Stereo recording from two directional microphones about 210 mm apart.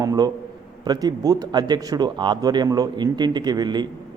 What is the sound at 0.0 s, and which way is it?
A man's voice, 15° right (ahead or behind).